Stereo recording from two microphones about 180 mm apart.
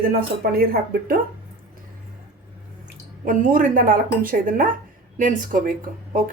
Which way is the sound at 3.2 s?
50° right (ahead or behind).